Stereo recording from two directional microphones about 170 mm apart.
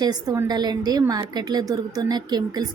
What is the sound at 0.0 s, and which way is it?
A woman's voice, 20° right (ahead or behind).